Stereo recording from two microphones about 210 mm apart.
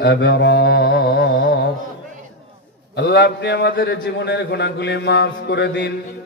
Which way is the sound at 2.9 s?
55° left (ahead or behind).